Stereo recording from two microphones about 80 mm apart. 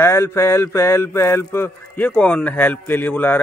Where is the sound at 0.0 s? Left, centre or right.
Left.